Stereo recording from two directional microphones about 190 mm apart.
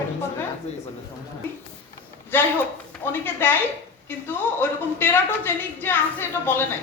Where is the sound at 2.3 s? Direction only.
10° left (ahead or behind).